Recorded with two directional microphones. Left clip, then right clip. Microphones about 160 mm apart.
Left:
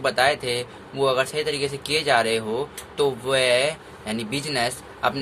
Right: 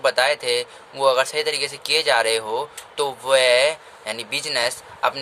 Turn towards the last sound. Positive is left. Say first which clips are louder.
# right 2 dB
turn(degrees=-30)  # may be behind; listen again after turning